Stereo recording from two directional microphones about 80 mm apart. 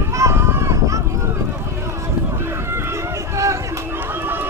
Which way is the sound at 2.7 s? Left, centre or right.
Right.